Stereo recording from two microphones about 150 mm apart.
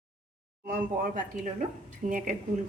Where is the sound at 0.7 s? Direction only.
70° right (ahead or behind).